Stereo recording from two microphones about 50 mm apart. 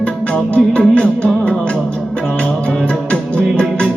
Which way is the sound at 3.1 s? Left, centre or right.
Centre.